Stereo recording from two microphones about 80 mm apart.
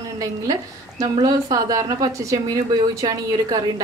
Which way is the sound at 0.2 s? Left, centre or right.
Right.